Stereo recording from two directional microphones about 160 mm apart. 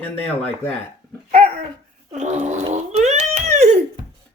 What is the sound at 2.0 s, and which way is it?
Gargling, 45° right (ahead or behind).